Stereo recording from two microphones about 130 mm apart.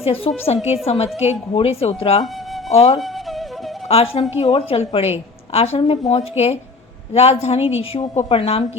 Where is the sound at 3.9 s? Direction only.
50° left (ahead or behind).